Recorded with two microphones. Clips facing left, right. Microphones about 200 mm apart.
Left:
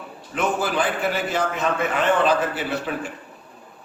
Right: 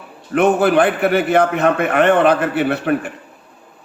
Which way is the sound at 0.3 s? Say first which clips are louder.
Right 10 dB; 60° right (ahead or behind).